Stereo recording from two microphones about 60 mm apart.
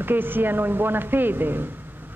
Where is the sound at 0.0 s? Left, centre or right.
Right.